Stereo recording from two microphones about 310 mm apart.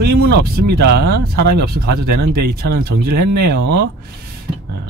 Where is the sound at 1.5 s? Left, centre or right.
Right.